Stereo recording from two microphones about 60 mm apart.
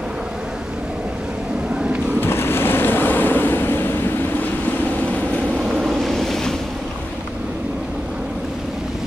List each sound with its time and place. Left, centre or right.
1.8 s vehicle: centre
2.1 s waves: left
5.7 s a sound: centre